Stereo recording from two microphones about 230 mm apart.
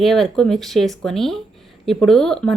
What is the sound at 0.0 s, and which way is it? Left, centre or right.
Speech, centre.